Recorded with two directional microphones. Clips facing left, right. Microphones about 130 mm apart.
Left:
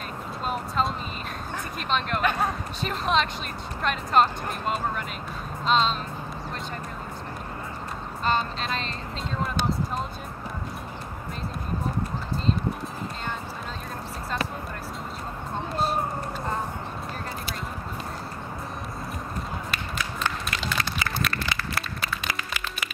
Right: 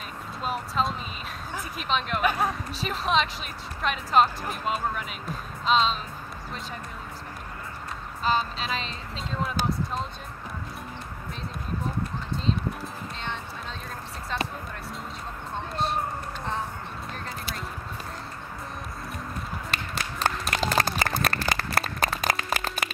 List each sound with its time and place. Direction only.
0.5 s speech: centre (ahead or behind)
8.2 s speech: centre (ahead or behind)
15.7 s speech: centre (ahead or behind)
19.7 s clapping: 40° right (ahead or behind)